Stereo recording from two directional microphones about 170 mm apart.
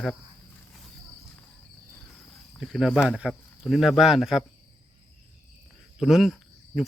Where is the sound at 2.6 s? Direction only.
Centre (ahead or behind).